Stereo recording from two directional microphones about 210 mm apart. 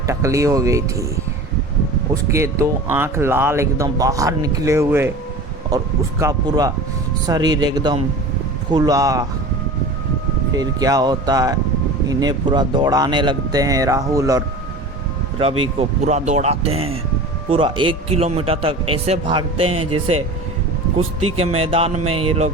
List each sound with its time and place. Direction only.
0.1 s speech: 15° right (ahead or behind)
2.3 s a man's voice: 15° right (ahead or behind)
10.5 s speech: 15° right (ahead or behind)
15.8 s a man's voice: 35° right (ahead or behind)
21.0 s speech: 90° right
21.3 s a man's voice: 30° right (ahead or behind)